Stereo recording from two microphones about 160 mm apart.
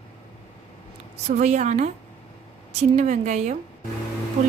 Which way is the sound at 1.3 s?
50° right (ahead or behind).